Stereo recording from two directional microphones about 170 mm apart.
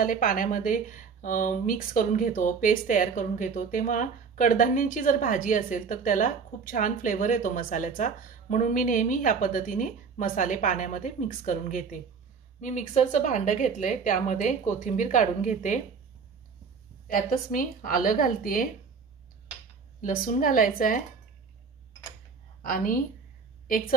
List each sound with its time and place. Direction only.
0.0 s speech: 55° left (ahead or behind)
17.1 s a woman's voice: 55° left (ahead or behind)
20.0 s a woman's voice: 55° left (ahead or behind)
22.6 s a woman's voice: 55° left (ahead or behind)